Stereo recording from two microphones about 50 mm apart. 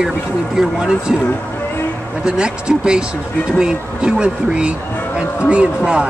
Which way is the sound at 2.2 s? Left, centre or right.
Centre.